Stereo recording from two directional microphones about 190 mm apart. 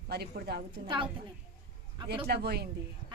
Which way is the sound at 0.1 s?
55° right (ahead or behind).